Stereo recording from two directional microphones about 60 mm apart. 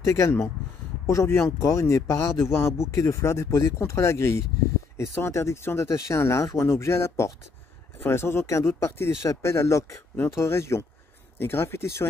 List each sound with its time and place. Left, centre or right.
0.0 s speech: left
2.9 s speech: left